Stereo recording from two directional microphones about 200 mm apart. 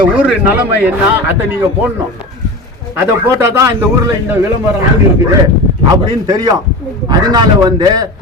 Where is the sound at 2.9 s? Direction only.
15° right (ahead or behind).